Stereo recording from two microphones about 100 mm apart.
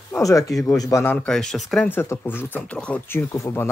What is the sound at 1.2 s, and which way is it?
Speech, 5° left (ahead or behind).